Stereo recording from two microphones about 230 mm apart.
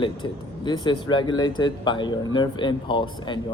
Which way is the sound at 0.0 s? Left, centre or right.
Centre.